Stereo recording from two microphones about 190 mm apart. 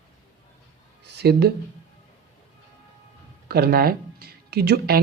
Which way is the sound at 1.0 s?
60° right (ahead or behind).